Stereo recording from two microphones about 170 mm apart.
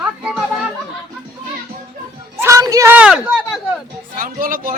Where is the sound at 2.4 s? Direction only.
20° right (ahead or behind).